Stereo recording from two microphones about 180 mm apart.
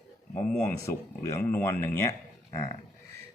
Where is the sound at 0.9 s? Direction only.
15° left (ahead or behind).